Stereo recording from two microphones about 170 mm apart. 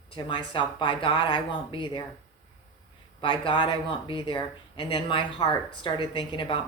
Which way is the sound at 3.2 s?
30° left (ahead or behind).